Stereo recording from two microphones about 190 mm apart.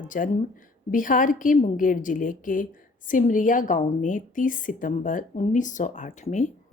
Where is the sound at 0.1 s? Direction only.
45° left (ahead or behind).